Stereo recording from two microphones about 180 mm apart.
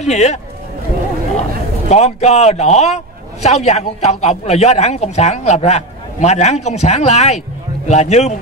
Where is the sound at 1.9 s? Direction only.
40° left (ahead or behind).